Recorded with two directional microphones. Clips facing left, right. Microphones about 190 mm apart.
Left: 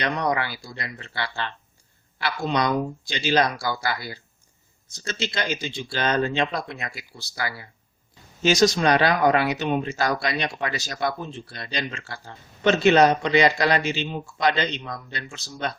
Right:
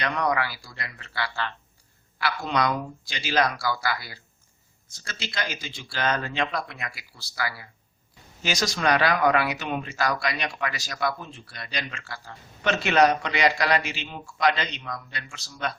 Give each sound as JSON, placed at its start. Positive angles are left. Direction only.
{"t": 0.0, "sound": "speech", "side_deg": 25}